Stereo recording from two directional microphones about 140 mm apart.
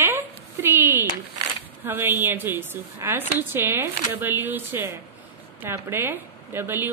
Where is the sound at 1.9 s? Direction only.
15° right (ahead or behind).